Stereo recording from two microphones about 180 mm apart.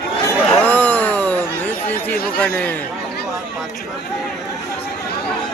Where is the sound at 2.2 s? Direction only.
5° left (ahead or behind).